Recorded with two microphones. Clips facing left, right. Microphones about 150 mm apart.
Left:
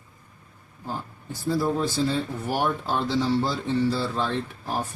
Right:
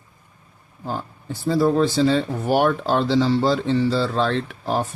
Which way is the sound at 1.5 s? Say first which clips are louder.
Right 6 dB; 90° right.